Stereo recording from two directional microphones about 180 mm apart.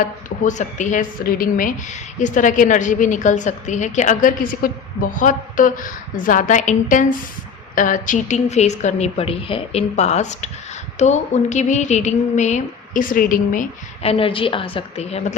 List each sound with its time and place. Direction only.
0.0 s a woman's voice: 45° left (ahead or behind)
14.0 s a woman's voice: 30° left (ahead or behind)